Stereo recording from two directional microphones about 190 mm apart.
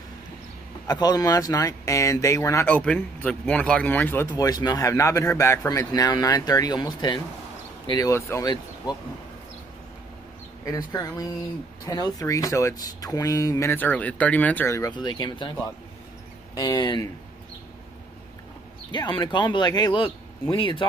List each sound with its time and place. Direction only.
0.8 s speech: 20° left (ahead or behind)
10.6 s speech: 20° left (ahead or behind)
16.5 s speech: 20° left (ahead or behind)
18.9 s speech: 25° left (ahead or behind)